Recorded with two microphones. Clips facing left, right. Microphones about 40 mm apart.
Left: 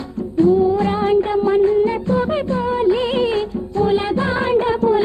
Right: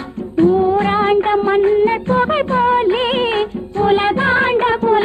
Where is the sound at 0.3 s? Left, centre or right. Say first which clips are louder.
Right 2 dB; right.